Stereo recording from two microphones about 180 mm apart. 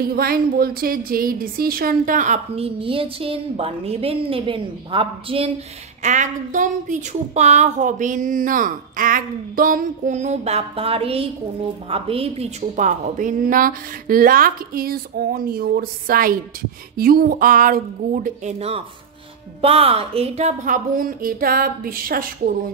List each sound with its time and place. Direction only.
0.0 s a woman's voice: 55° right (ahead or behind); by 5.5 s 30° right (ahead or behind)
6.0 s speech: 40° right (ahead or behind)